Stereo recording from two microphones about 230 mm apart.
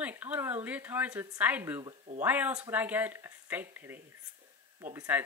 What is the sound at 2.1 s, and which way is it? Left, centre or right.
Speech, centre.